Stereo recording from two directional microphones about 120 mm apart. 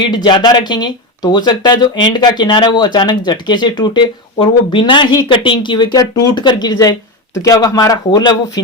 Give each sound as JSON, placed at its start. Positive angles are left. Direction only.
{"t": 0.0, "sound": "speech", "side_deg": 35}